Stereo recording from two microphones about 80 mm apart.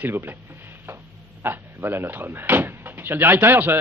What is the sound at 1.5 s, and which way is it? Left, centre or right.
Speech, right.